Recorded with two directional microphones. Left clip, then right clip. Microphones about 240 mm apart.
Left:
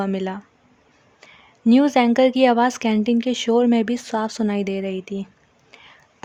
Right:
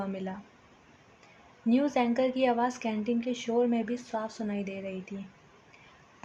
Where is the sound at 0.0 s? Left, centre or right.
Left.